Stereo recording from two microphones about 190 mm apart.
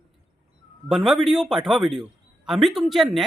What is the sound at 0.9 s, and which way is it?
Speech, centre (ahead or behind).